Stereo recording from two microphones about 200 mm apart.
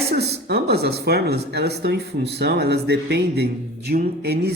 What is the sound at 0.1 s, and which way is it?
A man's voice, 55° right (ahead or behind).